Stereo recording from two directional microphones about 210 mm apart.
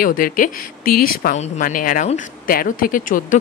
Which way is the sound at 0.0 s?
40° left (ahead or behind).